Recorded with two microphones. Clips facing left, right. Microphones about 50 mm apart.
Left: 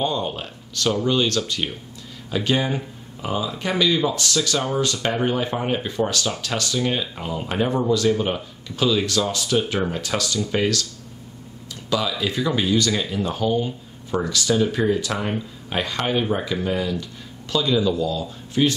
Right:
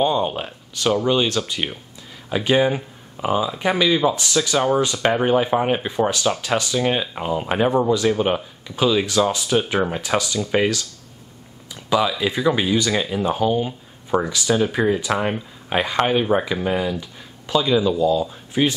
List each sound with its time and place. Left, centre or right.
0.0 s speech: right